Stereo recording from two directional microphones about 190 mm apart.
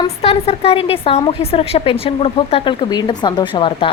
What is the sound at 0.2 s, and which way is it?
Speech, 30° left (ahead or behind).